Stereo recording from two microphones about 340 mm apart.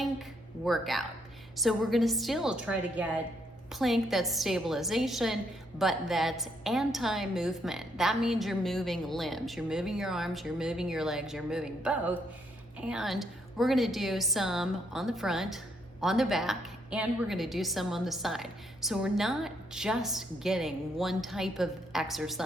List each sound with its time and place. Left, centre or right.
0.0 s a woman's voice: centre